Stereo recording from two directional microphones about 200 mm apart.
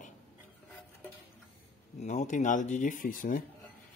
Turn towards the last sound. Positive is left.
turn(degrees=40)  # may be behind; listen again after turning